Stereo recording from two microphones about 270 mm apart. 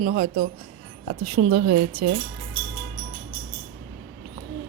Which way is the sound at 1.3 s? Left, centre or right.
Right.